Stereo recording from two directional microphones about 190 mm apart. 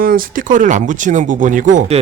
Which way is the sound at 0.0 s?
50° right (ahead or behind).